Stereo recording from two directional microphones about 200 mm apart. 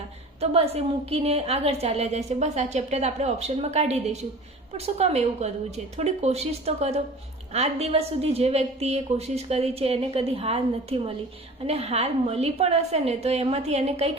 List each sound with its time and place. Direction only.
0.3 s a woman's voice: 30° right (ahead or behind)